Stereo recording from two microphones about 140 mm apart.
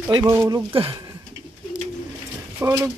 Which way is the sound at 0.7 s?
40° right (ahead or behind).